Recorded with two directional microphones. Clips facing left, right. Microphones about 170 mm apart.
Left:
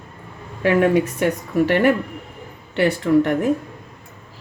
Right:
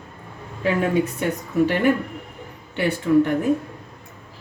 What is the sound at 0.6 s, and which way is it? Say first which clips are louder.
Speech: left 4 dB; 75° left (ahead or behind).